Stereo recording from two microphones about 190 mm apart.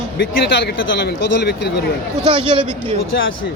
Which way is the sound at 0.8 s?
70° left (ahead or behind).